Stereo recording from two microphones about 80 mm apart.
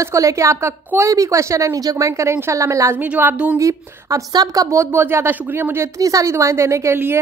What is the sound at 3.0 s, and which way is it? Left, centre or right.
Speech, right.